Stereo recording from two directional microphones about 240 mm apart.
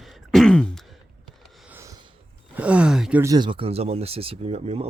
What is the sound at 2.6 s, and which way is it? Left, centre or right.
Speech, centre.